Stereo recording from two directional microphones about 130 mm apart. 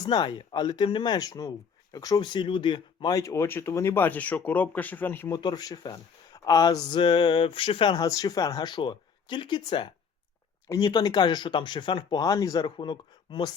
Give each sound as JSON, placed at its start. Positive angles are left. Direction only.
{"t": 0.0, "sound": "speech", "side_deg": 35}
{"t": 5.3, "sound": "speech", "side_deg": 30}
{"t": 8.0, "sound": "speech", "side_deg": 25}